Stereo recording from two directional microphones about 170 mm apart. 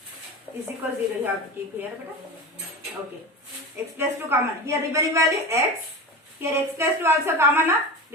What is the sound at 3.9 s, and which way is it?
A woman's voice, 15° right (ahead or behind).